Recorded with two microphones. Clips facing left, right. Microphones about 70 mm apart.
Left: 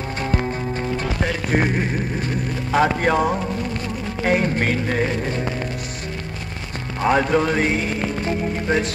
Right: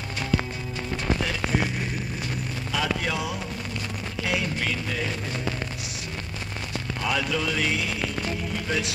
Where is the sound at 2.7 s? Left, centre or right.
Left.